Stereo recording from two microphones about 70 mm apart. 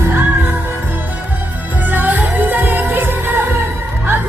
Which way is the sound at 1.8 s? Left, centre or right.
Right.